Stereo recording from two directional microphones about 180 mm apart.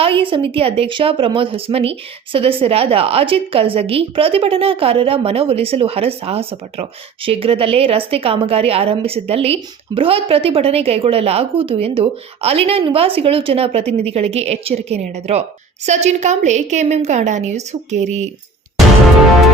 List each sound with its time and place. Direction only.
0.0 s a woman's voice: 30° right (ahead or behind)